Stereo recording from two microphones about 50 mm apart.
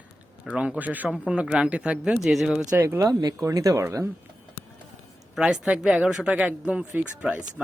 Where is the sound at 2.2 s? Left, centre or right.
Centre.